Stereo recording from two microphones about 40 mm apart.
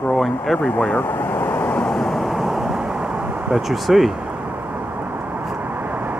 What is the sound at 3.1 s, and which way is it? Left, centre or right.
Vehicle, right.